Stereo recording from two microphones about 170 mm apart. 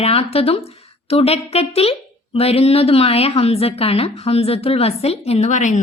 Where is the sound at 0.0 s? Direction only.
35° left (ahead or behind).